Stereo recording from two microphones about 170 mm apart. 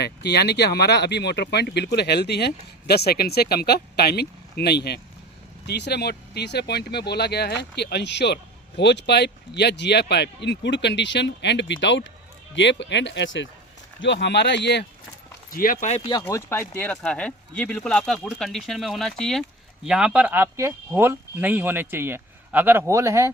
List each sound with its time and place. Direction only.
0.0 s speech: 70° left (ahead or behind); by 14.8 s 90° left
15.5 s speech: 55° left (ahead or behind)
16.2 s speech: 10° left (ahead or behind); by 23.3 s 15° right (ahead or behind)